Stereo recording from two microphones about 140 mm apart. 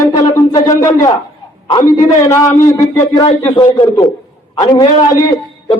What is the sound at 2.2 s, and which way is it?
Speech, 20° left (ahead or behind).